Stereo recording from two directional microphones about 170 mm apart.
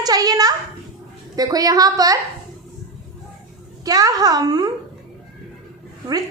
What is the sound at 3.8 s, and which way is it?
Speech, 20° right (ahead or behind).